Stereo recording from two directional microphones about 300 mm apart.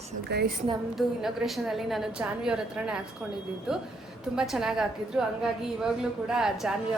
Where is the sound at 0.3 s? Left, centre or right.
Right.